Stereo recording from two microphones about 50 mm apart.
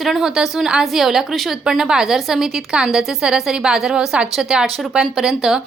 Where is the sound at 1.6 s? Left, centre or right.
Centre.